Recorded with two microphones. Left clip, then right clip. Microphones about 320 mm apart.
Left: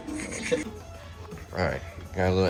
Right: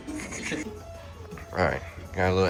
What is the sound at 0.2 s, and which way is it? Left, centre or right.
Music, centre.